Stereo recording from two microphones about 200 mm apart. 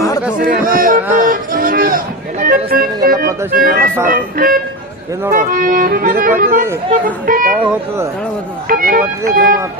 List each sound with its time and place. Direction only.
0.4 s speech: 45° right (ahead or behind)
1.2 s music: 45° right (ahead or behind)
4.1 s speech: 45° right (ahead or behind)
7.6 s speech: 10° right (ahead or behind)
8.7 s speech: 45° right (ahead or behind)